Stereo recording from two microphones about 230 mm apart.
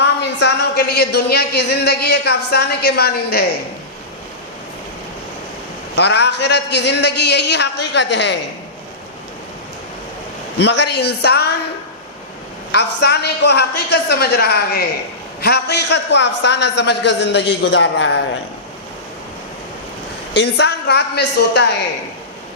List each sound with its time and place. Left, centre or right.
0.0 s a woman's voice: left
6.0 s a woman's voice: left
10.6 s a woman's voice: left
12.7 s a woman's voice: left
20.3 s a woman's voice: left